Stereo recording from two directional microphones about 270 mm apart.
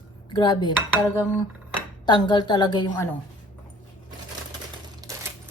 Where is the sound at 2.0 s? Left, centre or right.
Centre.